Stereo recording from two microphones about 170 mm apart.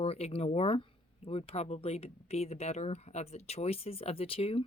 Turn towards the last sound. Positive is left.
turn(degrees=35)  # may be behind; listen again after turning